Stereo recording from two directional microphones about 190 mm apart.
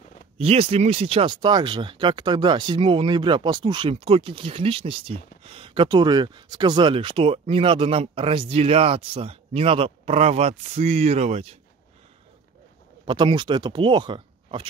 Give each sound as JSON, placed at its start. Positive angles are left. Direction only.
{"t": 0.4, "sound": "speech", "side_deg": -30}
{"t": 13.0, "sound": "speech", "side_deg": -25}